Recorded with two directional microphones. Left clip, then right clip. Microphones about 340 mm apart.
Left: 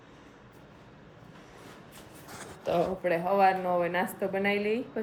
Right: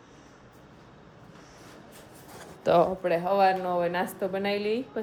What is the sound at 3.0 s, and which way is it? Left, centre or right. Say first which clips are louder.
Speech: right 1 dB; centre.